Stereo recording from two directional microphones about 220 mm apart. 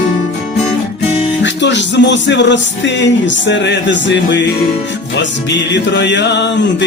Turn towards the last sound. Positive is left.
turn(degrees=50)  # may be behind; listen again after turning